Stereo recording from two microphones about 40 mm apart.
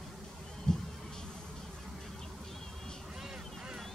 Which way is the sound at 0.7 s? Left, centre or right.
Left.